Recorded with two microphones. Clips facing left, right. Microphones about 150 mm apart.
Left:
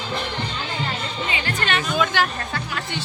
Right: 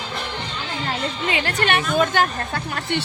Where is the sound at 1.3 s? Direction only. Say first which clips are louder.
Right 4 dB; 65° right (ahead or behind).